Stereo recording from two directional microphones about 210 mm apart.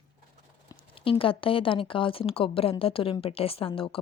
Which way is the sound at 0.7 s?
25° left (ahead or behind).